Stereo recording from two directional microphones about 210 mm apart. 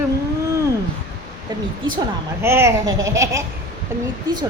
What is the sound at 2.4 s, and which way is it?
A man's voice, 10° right (ahead or behind).